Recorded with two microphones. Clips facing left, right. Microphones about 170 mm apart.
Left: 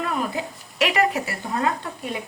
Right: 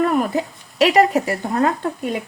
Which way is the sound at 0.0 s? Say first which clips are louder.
Right 8 dB; 40° right (ahead or behind).